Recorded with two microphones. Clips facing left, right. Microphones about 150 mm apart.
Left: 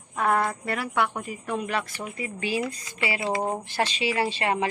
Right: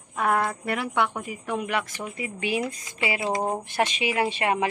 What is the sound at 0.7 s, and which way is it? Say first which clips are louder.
A woman's voice: right 1 dB; 20° right (ahead or behind).